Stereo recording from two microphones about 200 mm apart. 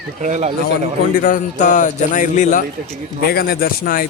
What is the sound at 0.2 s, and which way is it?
Speech, 35° right (ahead or behind).